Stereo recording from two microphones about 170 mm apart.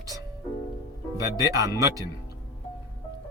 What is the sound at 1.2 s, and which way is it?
Speech, 20° right (ahead or behind).